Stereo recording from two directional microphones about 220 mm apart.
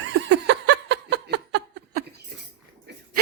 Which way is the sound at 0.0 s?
55° right (ahead or behind).